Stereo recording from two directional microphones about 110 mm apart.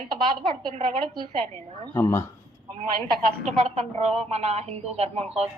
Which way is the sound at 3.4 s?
75° right (ahead or behind).